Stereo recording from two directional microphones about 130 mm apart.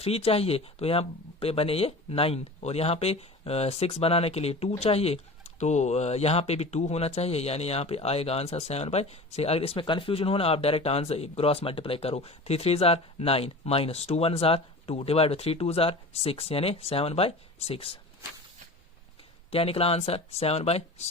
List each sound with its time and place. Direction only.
0.0 s speech: 50° left (ahead or behind)
19.5 s speech: 50° left (ahead or behind)